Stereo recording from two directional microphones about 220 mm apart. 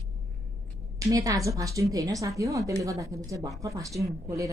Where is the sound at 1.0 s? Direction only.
15° right (ahead or behind).